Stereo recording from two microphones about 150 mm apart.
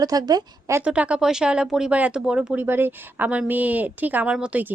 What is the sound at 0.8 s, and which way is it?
Speech, 10° right (ahead or behind).